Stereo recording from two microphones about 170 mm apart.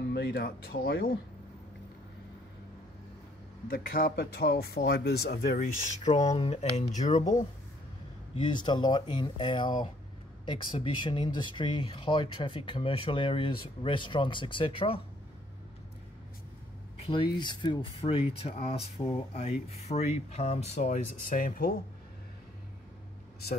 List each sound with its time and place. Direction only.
0.1 s speech: 70° left (ahead or behind)
3.6 s speech: 55° left (ahead or behind)
8.5 s speech: 25° left (ahead or behind)
17.1 s speech: 30° left (ahead or behind); by 21.7 s 55° left (ahead or behind)